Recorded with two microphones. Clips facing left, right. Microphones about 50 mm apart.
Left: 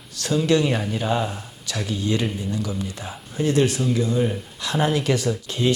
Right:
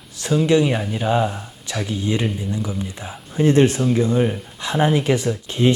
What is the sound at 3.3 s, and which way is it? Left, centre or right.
Speech, right.